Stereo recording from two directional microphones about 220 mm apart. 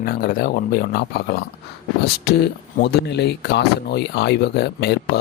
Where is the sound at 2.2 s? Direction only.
45° left (ahead or behind).